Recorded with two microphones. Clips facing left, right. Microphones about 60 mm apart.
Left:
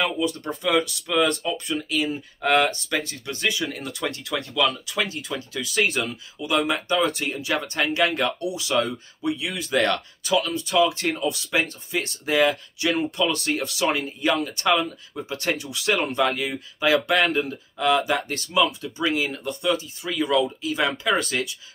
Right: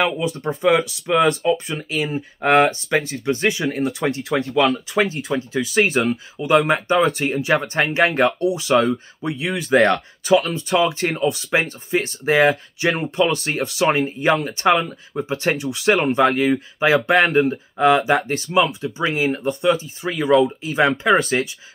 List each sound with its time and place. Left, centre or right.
0.0 s speech: right
16.8 s speech: right
21.1 s speech: right